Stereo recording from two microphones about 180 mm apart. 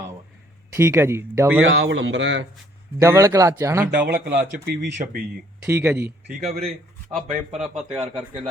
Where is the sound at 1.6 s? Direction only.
90° right.